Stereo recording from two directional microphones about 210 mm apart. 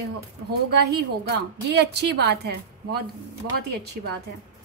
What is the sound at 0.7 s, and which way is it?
A woman's voice, 50° right (ahead or behind).